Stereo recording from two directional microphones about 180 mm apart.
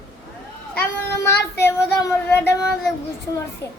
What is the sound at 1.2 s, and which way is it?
Speech, 15° left (ahead or behind).